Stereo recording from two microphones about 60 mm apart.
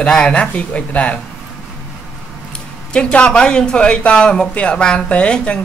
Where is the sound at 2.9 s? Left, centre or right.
Centre.